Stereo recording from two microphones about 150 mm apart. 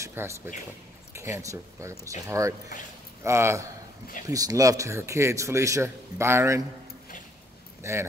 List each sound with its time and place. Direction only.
0.0 s speech: 15° right (ahead or behind)
7.8 s speech: 20° right (ahead or behind)